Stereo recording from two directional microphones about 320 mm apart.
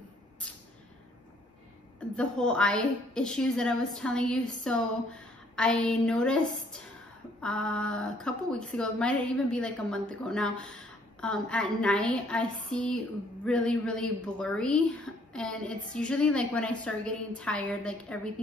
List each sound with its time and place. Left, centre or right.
2.0 s speech: centre